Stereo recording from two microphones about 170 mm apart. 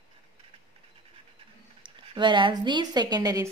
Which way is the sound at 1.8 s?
30° right (ahead or behind).